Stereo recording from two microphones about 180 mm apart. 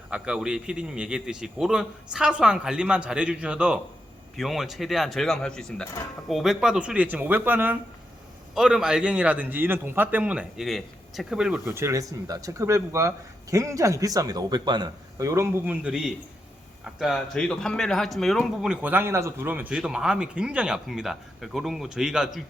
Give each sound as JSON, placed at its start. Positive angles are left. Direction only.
{"t": 0.1, "sound": "a man's voice", "side_deg": -5}
{"t": 11.7, "sound": "a man's voice", "side_deg": -15}